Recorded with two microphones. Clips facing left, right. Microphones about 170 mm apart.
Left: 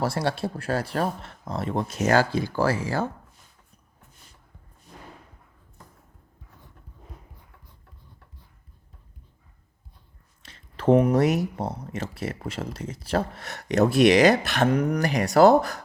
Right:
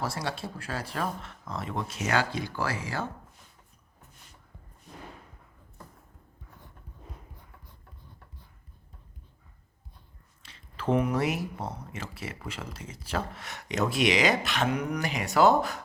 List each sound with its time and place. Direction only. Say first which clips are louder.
0.0 s speech: left 7 dB; 65° left (ahead or behind)
0.5 s speech: left 9 dB; 50° left (ahead or behind)
0.9 s speech: left 6 dB; 35° left (ahead or behind)
10.4 s speech: left 9 dB; 40° left (ahead or behind)